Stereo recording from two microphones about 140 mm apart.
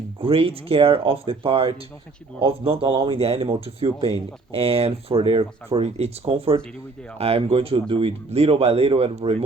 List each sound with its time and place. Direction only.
0.2 s speech: 45° right (ahead or behind)